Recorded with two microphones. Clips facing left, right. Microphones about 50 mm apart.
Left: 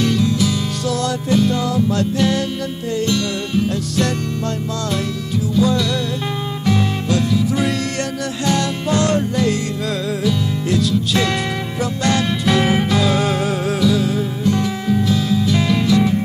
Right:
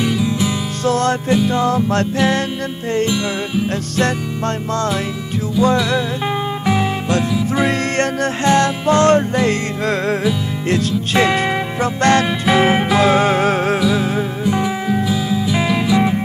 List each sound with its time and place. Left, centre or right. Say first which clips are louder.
0.0 s music: left 1 dB; centre
0.8 s music: right 5 dB; right
5.6 s music: right 3 dB; centre
8.5 s music: right 5 dB; right
11.2 s music: right 4 dB; right
11.8 s music: right 4 dB; right
12.4 s music: right 2 dB; right
13.0 s music: right 5 dB; right
13.7 s music: even; right